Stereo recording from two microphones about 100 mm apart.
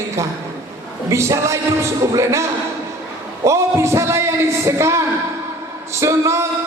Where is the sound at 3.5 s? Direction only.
30° right (ahead or behind).